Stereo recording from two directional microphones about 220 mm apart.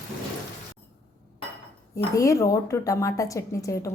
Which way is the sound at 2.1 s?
15° left (ahead or behind).